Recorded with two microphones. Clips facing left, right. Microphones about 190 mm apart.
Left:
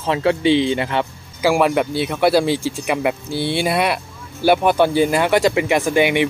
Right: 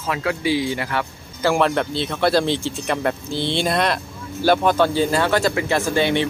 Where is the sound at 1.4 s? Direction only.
10° left (ahead or behind).